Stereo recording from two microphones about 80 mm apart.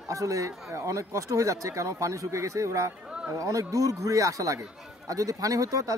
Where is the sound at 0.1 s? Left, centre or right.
Right.